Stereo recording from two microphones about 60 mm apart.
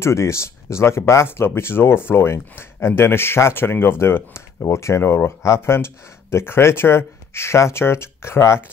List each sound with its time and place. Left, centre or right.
0.0 s speech: left
5.4 s speech: left